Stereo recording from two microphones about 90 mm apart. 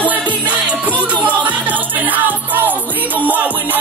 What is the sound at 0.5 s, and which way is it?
Music, 15° right (ahead or behind).